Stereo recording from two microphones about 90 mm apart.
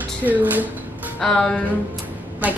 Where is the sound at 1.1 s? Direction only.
10° left (ahead or behind).